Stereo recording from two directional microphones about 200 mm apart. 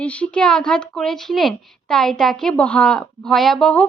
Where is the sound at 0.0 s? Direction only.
5° left (ahead or behind).